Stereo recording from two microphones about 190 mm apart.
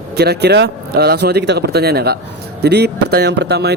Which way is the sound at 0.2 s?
60° right (ahead or behind).